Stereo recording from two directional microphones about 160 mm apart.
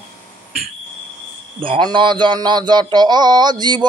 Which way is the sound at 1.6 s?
30° right (ahead or behind).